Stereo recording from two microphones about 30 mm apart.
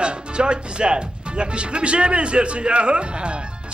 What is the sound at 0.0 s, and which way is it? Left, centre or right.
Speech, right.